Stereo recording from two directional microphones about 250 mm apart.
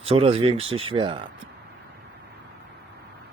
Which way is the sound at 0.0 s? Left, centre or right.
Right.